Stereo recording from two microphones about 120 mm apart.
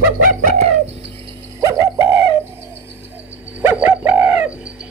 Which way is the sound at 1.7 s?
20° right (ahead or behind).